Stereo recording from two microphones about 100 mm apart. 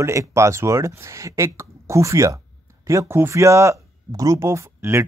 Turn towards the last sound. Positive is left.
turn(degrees=-25)  # may be behind; listen again after turning